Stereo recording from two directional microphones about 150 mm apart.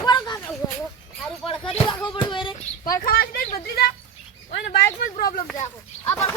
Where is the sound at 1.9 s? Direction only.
30° left (ahead or behind).